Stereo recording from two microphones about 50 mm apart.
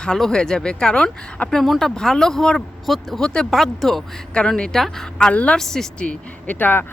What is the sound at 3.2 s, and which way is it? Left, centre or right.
Speech, centre.